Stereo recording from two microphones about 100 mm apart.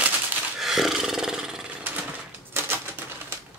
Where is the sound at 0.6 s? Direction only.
5° right (ahead or behind).